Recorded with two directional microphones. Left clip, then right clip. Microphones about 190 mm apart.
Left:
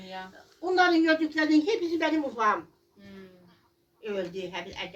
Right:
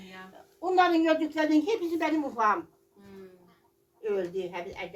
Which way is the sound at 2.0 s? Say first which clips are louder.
Right 1 dB; 40° right (ahead or behind).